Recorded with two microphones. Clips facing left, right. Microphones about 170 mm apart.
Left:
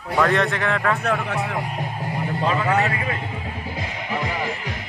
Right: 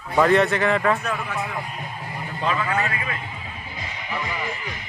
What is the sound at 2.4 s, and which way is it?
Speech, 35° left (ahead or behind).